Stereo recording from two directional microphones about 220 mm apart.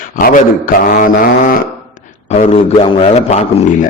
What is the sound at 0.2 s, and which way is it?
A man's voice, 40° left (ahead or behind).